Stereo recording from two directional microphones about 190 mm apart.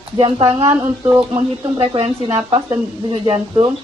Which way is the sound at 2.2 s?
15° right (ahead or behind).